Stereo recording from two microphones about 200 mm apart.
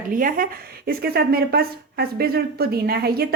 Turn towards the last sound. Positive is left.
turn(degrees=-50)  # may be behind; listen again after turning